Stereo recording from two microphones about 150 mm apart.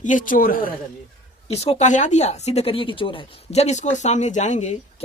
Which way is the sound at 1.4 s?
45° left (ahead or behind).